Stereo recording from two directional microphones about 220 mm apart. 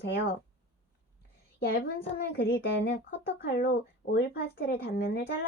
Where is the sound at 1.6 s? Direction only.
45° left (ahead or behind).